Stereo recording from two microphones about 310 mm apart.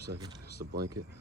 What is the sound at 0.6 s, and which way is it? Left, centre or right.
Speech, right.